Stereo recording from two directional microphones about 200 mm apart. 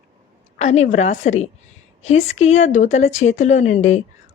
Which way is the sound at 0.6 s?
35° left (ahead or behind).